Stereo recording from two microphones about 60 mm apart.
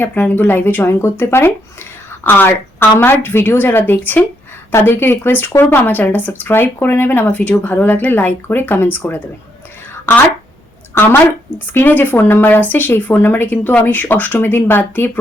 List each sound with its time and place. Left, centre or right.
0.1 s speech: left